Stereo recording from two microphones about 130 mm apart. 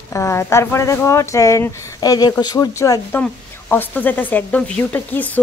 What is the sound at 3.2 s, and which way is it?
A woman's voice, 15° left (ahead or behind).